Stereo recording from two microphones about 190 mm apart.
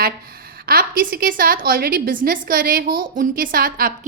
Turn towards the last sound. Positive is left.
turn(degrees=-50)  # may be behind; listen again after turning